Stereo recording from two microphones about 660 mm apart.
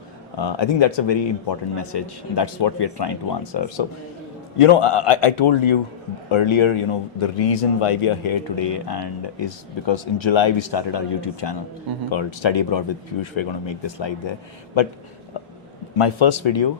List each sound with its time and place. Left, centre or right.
0.3 s speech: left
4.5 s a man's voice: left
16.0 s a man's voice: left